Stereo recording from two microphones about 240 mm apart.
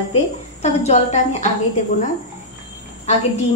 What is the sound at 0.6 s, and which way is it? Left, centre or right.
Speech, left.